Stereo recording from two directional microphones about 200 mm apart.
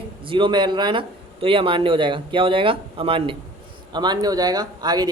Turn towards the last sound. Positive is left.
turn(degrees=-20)  # may be behind; listen again after turning